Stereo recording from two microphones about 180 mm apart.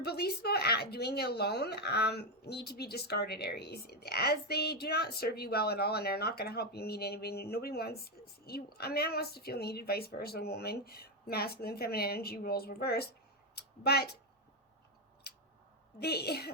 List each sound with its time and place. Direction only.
0.0 s speech: 60° left (ahead or behind)
16.0 s speech: 65° left (ahead or behind)